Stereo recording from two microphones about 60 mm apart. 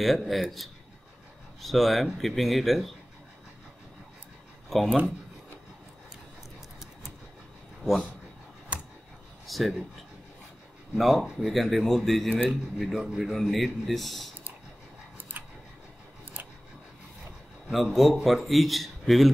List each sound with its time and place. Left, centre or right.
0.0 s a man's voice: centre
4.7 s a man's voice: centre
9.5 s a man's voice: centre
11.0 s a man's voice: centre
15.3 s a sound: right
17.6 s a man's voice: centre